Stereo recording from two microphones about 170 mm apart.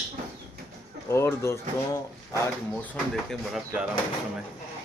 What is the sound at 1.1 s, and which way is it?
Speech, 15° left (ahead or behind).